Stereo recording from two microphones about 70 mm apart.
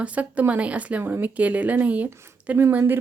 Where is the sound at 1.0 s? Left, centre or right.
Right.